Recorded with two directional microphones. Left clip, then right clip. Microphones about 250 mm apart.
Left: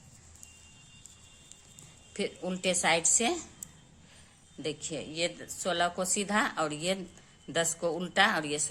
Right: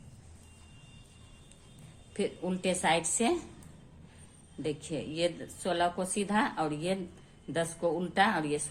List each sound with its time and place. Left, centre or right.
2.1 s a woman's voice: left
4.6 s a woman's voice: left